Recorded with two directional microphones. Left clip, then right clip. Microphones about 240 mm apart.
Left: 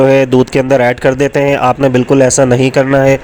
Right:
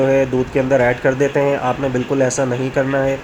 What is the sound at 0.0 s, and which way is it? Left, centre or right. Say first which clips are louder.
A man's voice: left 7 dB; left.